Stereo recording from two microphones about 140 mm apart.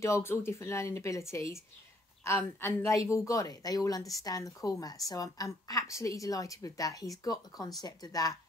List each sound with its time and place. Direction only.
0.0 s a woman's voice: 20° left (ahead or behind)